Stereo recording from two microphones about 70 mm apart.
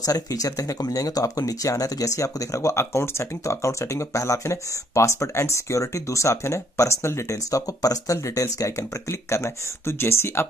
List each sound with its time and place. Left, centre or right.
0.0 s speech: left